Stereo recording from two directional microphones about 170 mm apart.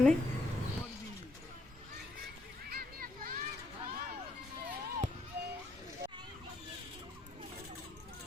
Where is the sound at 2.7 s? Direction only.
60° right (ahead or behind).